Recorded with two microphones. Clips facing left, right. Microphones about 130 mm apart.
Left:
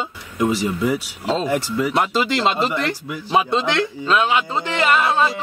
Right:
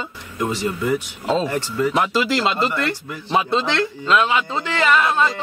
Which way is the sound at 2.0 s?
Centre (ahead or behind).